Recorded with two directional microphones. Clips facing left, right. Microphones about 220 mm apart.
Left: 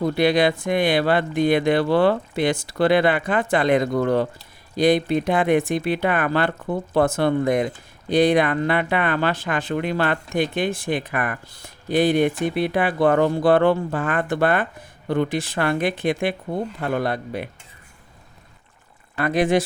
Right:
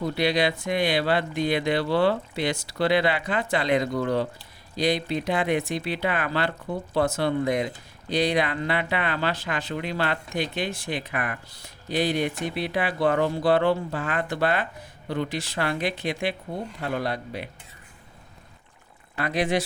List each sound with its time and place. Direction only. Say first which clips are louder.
0.0 s speech: left 5 dB; 50° left (ahead or behind)
19.1 s speech: left 6 dB; 50° left (ahead or behind)